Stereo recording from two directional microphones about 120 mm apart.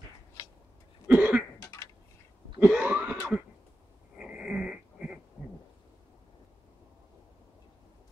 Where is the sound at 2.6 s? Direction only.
10° right (ahead or behind).